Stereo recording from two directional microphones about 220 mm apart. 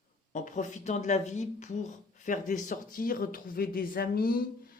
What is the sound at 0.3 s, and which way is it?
Speech, 35° left (ahead or behind).